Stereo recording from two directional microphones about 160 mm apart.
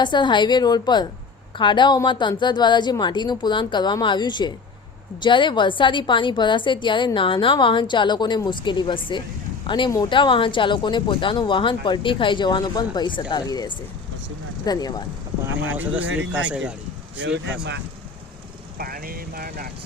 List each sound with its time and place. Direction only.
0.0 s a woman's voice: 30° left (ahead or behind)
15.7 s speech: 10° right (ahead or behind)
17.3 s speech: 90° right
18.8 s speech: 65° right (ahead or behind)